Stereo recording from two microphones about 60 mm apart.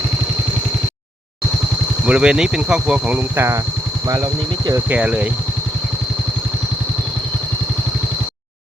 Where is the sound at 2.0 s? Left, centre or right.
Centre.